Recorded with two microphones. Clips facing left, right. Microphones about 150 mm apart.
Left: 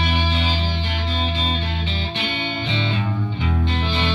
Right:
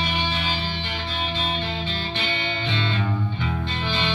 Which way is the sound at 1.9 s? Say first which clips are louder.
Left 2 dB; 10° left (ahead or behind).